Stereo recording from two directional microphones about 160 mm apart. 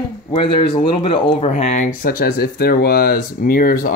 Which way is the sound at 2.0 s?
65° left (ahead or behind).